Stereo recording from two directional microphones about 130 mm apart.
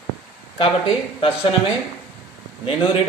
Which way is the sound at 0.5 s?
40° left (ahead or behind).